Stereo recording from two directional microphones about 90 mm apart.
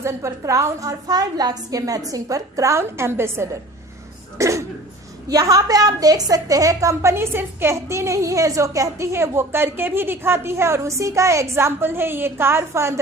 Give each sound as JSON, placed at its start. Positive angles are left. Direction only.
{"t": 0.0, "sound": "a woman's voice", "side_deg": -35}